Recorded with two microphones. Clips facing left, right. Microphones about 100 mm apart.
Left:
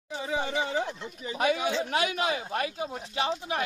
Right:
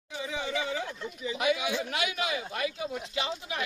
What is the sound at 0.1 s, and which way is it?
Speech, 35° left (ahead or behind).